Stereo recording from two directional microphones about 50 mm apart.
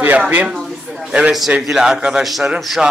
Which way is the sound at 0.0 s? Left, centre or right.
Right.